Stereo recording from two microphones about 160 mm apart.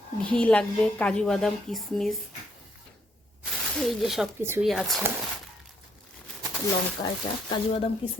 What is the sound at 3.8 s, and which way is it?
Speech, centre (ahead or behind).